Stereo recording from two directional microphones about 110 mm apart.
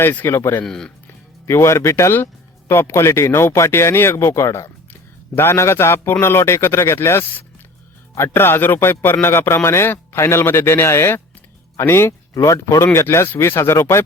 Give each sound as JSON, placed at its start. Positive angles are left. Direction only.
{"t": 0.0, "sound": "speech", "side_deg": 20}
{"t": 0.6, "sound": "speech", "side_deg": 5}
{"t": 1.5, "sound": "speech", "side_deg": 25}